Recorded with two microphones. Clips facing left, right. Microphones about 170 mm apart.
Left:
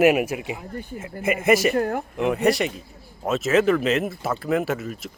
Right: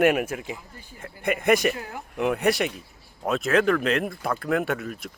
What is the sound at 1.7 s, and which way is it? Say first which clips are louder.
Speech: left 14 dB; 55° left (ahead or behind).